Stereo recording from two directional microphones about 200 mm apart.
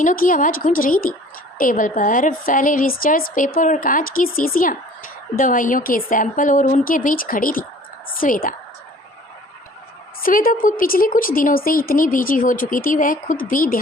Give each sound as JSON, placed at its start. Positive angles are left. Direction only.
{"t": 0.0, "sound": "a woman's voice", "side_deg": 40}
{"t": 10.2, "sound": "speech", "side_deg": 45}